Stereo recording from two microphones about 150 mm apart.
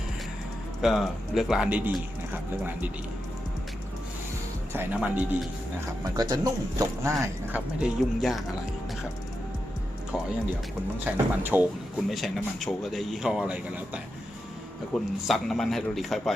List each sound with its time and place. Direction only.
0.8 s a man's voice: centre (ahead or behind)
4.9 s a man's voice: 5° right (ahead or behind)
6.1 s speech: 25° right (ahead or behind)
7.8 s a man's voice: centre (ahead or behind)
11.0 s speech: 10° right (ahead or behind)
12.0 s a man's voice: centre (ahead or behind)